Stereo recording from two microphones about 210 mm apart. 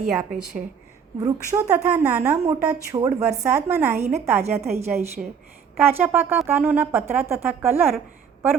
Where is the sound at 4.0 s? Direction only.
30° right (ahead or behind).